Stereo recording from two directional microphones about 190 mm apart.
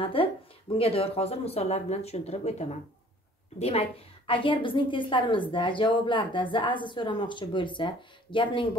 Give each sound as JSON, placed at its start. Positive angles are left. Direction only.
{"t": 0.0, "sound": "a woman's voice", "side_deg": 25}